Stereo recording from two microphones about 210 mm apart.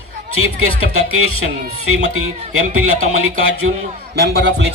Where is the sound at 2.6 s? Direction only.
90° right.